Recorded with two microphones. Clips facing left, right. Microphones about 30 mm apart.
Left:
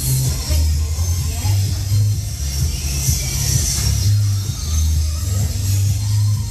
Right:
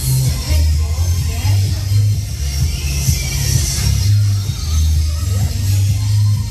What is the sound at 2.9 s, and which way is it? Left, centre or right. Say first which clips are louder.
Music: right 2 dB; right.